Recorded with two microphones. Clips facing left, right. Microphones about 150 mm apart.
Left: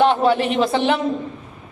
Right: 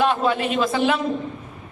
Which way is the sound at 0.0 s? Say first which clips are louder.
Left 4 dB; 30° left (ahead or behind).